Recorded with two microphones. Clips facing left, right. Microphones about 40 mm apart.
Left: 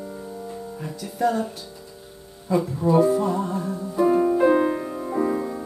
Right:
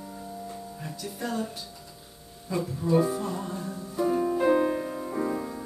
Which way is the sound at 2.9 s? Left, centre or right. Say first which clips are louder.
Left 6 dB; centre.